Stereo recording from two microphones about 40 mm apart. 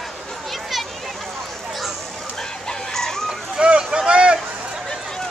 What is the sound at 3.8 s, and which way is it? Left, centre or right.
Vehicle, right.